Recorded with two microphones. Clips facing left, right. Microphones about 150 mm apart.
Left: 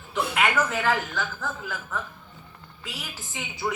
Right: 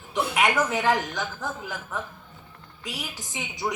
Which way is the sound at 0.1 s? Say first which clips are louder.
Right 1 dB; 15° right (ahead or behind).